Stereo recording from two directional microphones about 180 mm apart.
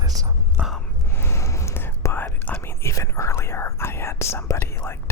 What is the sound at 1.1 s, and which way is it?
Whispering, 15° left (ahead or behind).